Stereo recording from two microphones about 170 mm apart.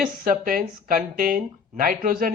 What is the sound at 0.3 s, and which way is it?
Speech, 55° right (ahead or behind).